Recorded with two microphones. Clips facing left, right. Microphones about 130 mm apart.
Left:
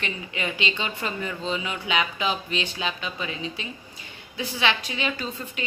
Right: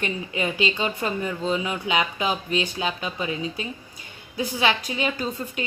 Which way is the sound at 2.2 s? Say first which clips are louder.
Right 3 dB; 45° right (ahead or behind).